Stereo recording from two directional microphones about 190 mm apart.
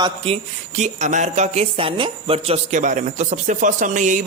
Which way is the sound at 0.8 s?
40° right (ahead or behind).